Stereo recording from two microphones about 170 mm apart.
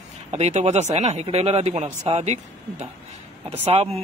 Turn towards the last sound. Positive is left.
turn(degrees=-40)  # may be behind; listen again after turning